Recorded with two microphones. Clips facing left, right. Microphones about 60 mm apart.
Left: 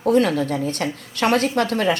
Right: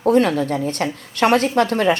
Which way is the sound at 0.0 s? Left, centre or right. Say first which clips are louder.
Right 2 dB; right.